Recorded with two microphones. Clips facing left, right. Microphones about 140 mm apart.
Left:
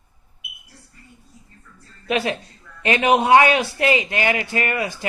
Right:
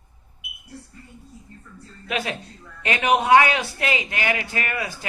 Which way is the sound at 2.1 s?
25° left (ahead or behind).